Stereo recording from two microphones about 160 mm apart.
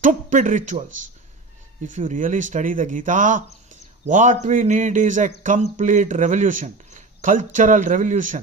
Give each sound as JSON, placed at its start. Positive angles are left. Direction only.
{"t": 0.0, "sound": "speech", "side_deg": -55}